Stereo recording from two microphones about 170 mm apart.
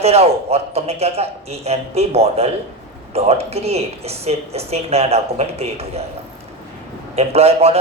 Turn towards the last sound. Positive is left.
turn(degrees=-35)  # may be behind; listen again after turning